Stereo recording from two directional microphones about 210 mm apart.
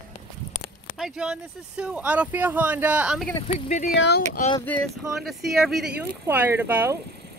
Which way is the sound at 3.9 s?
55° left (ahead or behind).